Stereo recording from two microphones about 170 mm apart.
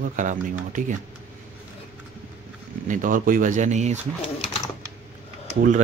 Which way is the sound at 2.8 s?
55° right (ahead or behind).